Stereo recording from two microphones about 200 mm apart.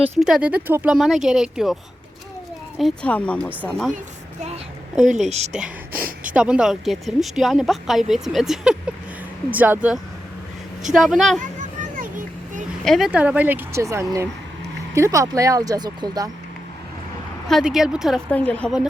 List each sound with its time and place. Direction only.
0.2 s speech: 5° right (ahead or behind)
5.2 s a woman's voice: 35° right (ahead or behind)
5.9 s a woman's voice: 50° right (ahead or behind)
6.2 s speech: 5° right (ahead or behind)
11.3 s a sound: 40° right (ahead or behind)
12.8 s speech: centre (ahead or behind); by 16.3 s 20° right (ahead or behind)
17.5 s speech: 5° right (ahead or behind)